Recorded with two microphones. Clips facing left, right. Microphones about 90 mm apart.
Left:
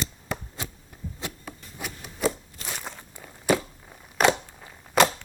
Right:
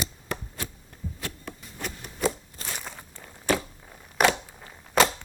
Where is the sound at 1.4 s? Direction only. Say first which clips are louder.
Right 1 dB; 5° left (ahead or behind).